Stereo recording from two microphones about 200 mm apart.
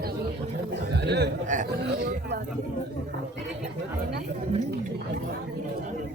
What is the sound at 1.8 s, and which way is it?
Speech, 55° right (ahead or behind).